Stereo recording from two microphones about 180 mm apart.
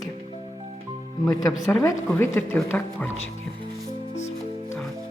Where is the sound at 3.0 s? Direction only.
90° left.